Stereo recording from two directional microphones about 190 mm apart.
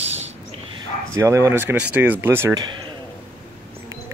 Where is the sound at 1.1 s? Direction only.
15° right (ahead or behind).